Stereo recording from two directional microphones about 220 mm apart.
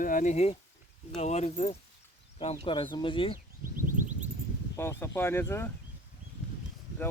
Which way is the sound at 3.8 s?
35° right (ahead or behind).